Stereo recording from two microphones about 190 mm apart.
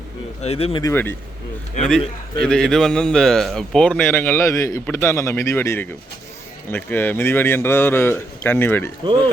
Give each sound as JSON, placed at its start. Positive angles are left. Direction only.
{"t": 0.4, "sound": "speech", "side_deg": 30}
{"t": 0.8, "sound": "speech", "side_deg": 15}
{"t": 2.4, "sound": "speech", "side_deg": 5}